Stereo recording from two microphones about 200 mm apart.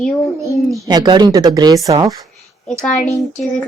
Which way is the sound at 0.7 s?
20° right (ahead or behind).